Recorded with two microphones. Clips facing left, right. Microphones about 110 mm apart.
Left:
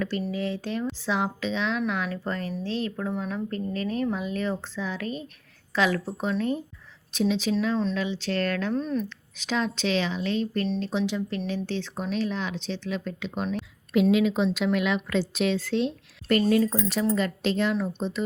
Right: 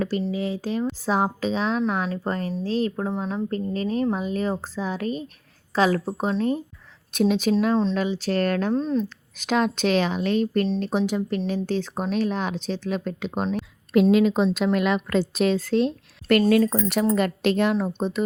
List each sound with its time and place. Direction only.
0.2 s speech: 30° right (ahead or behind)
7.1 s speech: 55° right (ahead or behind)
7.8 s speech: 35° right (ahead or behind)
9.4 s speech: 55° right (ahead or behind)
16.5 s a woman's voice: 70° right (ahead or behind); by 18.3 s 50° right (ahead or behind)